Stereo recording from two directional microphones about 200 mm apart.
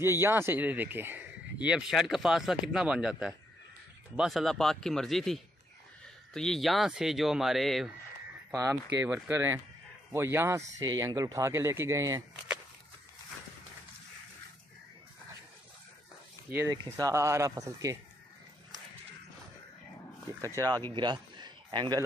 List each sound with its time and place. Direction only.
0.0 s speech: 10° right (ahead or behind)
8.5 s speech: 15° right (ahead or behind)
16.4 s speech: 10° right (ahead or behind)
20.5 s speech: 20° right (ahead or behind)
20.9 s a sound: 20° right (ahead or behind)